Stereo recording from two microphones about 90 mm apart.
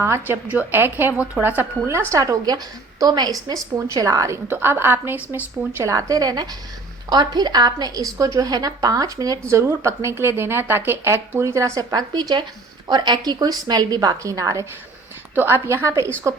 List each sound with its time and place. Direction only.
0.0 s a woman's voice: 25° right (ahead or behind)
4.4 s a woman's voice: 25° right (ahead or behind)
5.8 s a woman's voice: 40° right (ahead or behind)
9.5 s a woman's voice: 30° right (ahead or behind)